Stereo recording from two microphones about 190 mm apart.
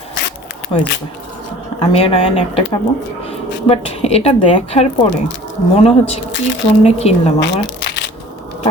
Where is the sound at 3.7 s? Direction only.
30° left (ahead or behind).